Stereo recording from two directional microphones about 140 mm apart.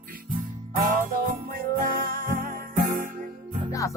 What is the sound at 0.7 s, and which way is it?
Music, 75° right (ahead or behind).